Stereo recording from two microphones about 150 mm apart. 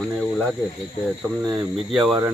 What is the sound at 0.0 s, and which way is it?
Speech, 5° left (ahead or behind).